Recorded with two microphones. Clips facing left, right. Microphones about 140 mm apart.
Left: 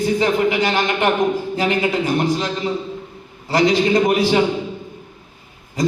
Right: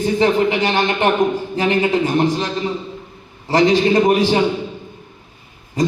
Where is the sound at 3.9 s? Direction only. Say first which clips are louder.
Right 2 dB; 25° right (ahead or behind).